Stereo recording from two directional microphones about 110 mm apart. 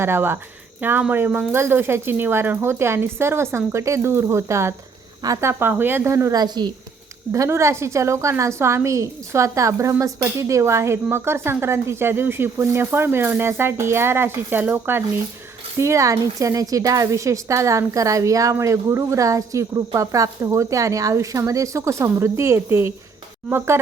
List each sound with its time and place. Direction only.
0.0 s speech: 20° right (ahead or behind); by 6.7 s 40° right (ahead or behind)
7.3 s speech: 25° right (ahead or behind)